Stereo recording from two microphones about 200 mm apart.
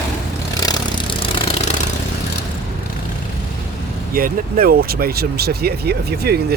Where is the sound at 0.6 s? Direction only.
20° left (ahead or behind).